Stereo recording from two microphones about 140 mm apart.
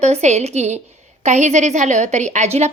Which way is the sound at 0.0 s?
55° right (ahead or behind).